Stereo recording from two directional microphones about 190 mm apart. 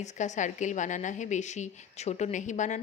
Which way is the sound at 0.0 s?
40° left (ahead or behind).